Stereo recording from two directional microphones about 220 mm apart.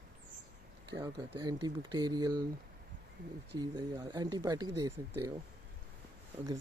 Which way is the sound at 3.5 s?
20° right (ahead or behind).